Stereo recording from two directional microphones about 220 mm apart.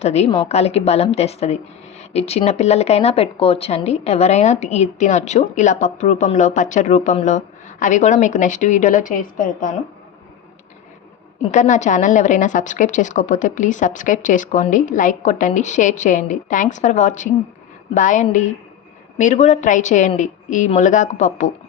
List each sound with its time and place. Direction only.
0.0 s a woman's voice: 30° left (ahead or behind)
11.4 s a woman's voice: 35° left (ahead or behind)